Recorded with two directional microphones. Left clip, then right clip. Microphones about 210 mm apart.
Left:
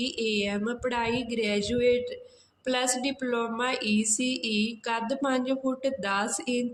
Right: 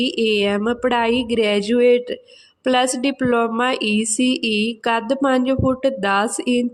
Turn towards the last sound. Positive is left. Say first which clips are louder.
# right 10 dB
turn(degrees=-45)  # may be behind; listen again after turning